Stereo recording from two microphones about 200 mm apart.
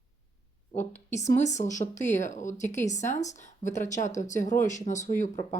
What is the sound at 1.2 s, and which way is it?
A woman's voice, 35° left (ahead or behind).